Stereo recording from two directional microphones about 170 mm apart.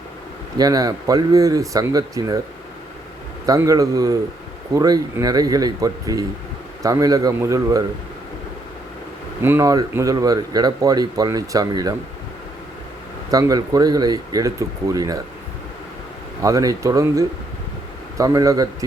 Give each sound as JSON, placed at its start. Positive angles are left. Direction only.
{"t": 0.6, "sound": "speech", "side_deg": -20}
{"t": 3.4, "sound": "speech", "side_deg": -20}
{"t": 9.4, "sound": "speech", "side_deg": -15}
{"t": 13.3, "sound": "speech", "side_deg": -20}
{"t": 16.4, "sound": "speech", "side_deg": -20}